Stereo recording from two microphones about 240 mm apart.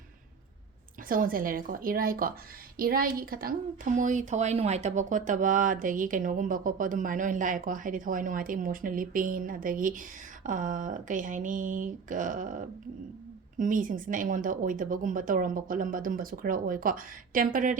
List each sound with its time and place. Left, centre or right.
1.0 s speech: right